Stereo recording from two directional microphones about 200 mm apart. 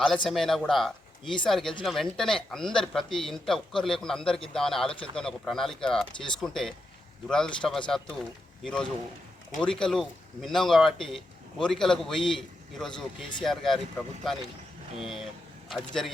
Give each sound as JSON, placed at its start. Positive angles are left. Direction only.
{"t": 0.3, "sound": "speech", "side_deg": 0}